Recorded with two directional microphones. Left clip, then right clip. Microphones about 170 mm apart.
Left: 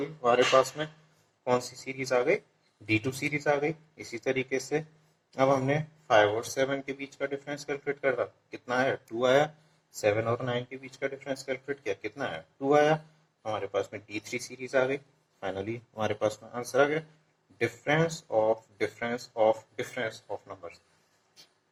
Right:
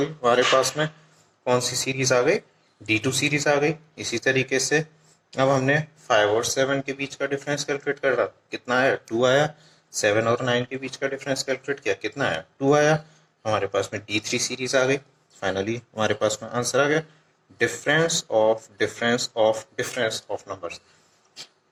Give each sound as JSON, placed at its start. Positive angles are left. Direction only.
{"t": 0.0, "sound": "speech", "side_deg": -35}